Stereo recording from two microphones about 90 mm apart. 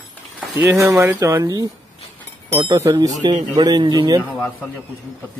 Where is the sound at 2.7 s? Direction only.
40° right (ahead or behind).